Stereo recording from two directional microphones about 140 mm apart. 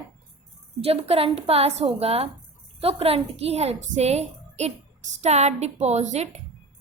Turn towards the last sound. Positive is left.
turn(degrees=-55)  # may be behind; listen again after turning